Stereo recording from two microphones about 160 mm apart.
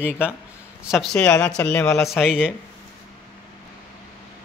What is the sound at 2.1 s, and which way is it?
Speech, 5° right (ahead or behind).